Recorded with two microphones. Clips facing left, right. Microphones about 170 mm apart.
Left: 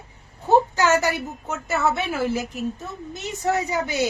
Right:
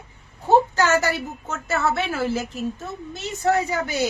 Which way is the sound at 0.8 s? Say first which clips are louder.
Even; 15° left (ahead or behind).